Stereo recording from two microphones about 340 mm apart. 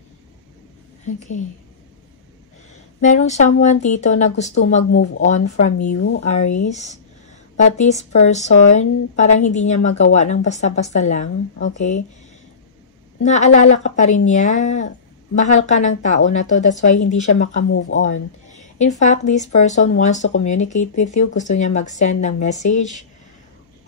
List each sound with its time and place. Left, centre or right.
3.0 s speech: left
4.9 s speech: left
5.2 s speech: left
6.2 s speech: left
13.2 s speech: left
17.6 s speech: left
18.6 s speech: left